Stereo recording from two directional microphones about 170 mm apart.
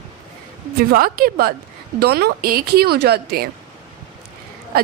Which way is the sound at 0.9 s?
60° right (ahead or behind).